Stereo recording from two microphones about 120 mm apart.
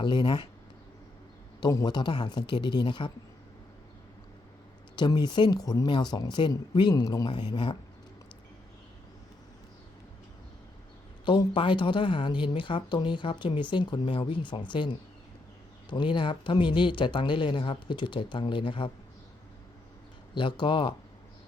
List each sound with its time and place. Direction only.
0.0 s speech: 40° left (ahead or behind)
1.6 s speech: 35° left (ahead or behind)
4.9 s speech: 35° left (ahead or behind)
11.3 s speech: 45° left (ahead or behind)
20.3 s speech: 40° left (ahead or behind)